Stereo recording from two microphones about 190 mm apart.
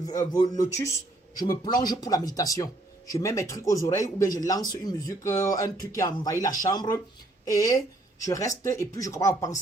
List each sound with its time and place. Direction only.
0.0 s speech: 20° left (ahead or behind)